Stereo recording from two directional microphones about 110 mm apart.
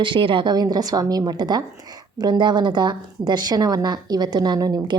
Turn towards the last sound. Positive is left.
turn(degrees=-35)  # may be behind; listen again after turning